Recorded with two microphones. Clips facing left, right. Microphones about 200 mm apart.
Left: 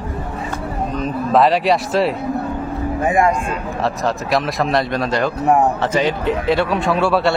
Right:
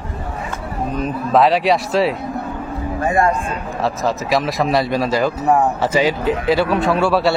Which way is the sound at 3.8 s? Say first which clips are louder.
Right 1 dB; centre (ahead or behind).